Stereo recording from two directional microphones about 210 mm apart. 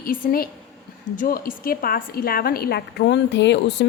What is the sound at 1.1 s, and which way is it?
A woman's voice, 40° left (ahead or behind).